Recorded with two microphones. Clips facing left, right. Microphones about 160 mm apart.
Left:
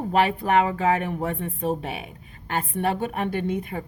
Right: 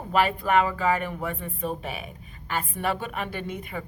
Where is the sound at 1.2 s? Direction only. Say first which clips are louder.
Left 4 dB; 70° left (ahead or behind).